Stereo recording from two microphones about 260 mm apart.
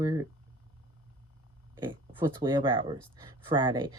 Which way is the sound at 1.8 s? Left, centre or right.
Centre.